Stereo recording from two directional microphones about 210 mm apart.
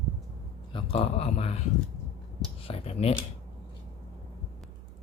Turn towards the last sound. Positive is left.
turn(degrees=30)  # may be behind; listen again after turning